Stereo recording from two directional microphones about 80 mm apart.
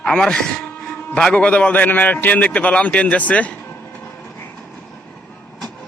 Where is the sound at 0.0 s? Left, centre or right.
Centre.